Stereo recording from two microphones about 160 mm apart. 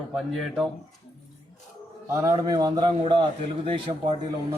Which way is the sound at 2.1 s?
20° right (ahead or behind).